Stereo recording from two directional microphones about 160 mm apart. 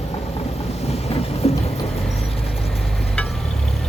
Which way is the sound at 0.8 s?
40° left (ahead or behind).